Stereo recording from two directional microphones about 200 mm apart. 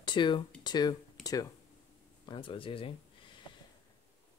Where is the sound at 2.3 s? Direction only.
25° left (ahead or behind).